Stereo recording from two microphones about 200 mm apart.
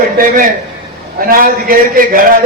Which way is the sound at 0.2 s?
45° right (ahead or behind).